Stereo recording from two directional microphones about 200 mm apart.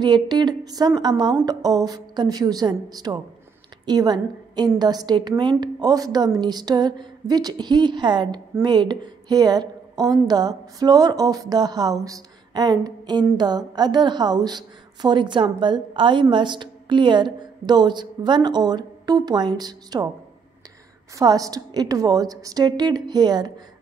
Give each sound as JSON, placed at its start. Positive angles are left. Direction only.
{"t": 0.0, "sound": "a woman's voice", "side_deg": -20}
{"t": 21.2, "sound": "speech", "side_deg": -20}